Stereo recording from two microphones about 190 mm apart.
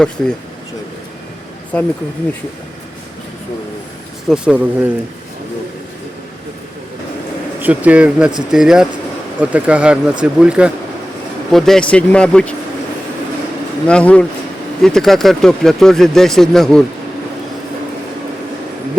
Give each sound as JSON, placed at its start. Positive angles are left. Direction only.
{"t": 0.2, "sound": "speech", "side_deg": 5}
{"t": 1.7, "sound": "speech", "side_deg": 5}
{"t": 4.3, "sound": "a man's voice", "side_deg": -5}
{"t": 7.6, "sound": "a man's voice", "side_deg": -10}
{"t": 13.8, "sound": "speech", "side_deg": 5}